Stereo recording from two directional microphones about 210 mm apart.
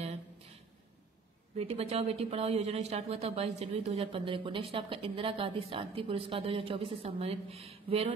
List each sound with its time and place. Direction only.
1.6 s speech: 30° right (ahead or behind)